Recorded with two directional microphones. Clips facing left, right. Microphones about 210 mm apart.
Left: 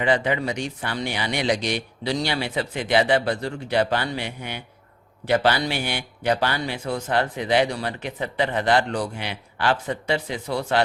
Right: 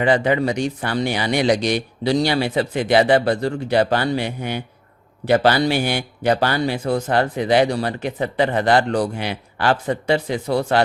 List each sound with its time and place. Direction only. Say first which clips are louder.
0.0 s a man's voice: right 5 dB; 40° right (ahead or behind)